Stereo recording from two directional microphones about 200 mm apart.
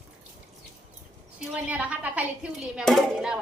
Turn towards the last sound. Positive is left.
turn(degrees=-5)  # may be behind; listen again after turning